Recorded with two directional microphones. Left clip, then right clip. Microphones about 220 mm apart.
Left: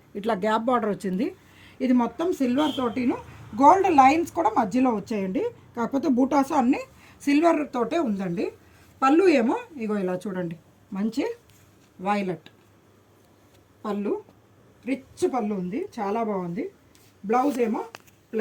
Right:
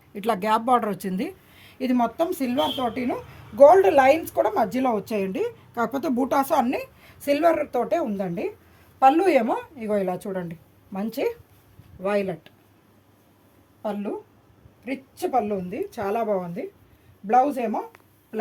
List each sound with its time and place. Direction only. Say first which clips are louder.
0.1 s a woman's voice: right 2 dB; 50° right (ahead or behind)
12.0 s speech: right 2 dB; 25° right (ahead or behind)
14.8 s a woman's voice: left 2 dB; 30° right (ahead or behind)